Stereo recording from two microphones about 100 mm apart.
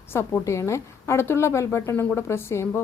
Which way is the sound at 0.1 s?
30° left (ahead or behind).